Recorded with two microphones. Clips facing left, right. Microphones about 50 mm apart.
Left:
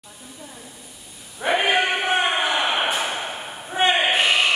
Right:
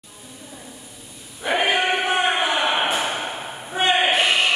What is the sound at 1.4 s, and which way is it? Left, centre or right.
Sheep, left.